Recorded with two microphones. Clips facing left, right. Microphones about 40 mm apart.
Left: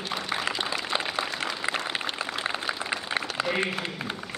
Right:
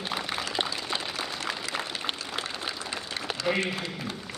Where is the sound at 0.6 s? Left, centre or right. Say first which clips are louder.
Left 3 dB; left.